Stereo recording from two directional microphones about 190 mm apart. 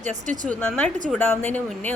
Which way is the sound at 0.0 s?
40° right (ahead or behind).